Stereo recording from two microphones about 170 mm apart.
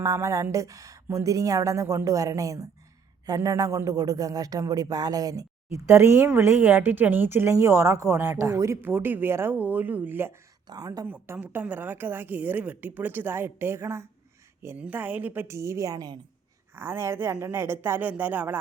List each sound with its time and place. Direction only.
0.0 s speech: 20° right (ahead or behind)
11.1 s speech: 10° right (ahead or behind)